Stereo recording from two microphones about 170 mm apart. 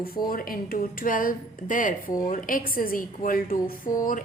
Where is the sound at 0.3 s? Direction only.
55° left (ahead or behind).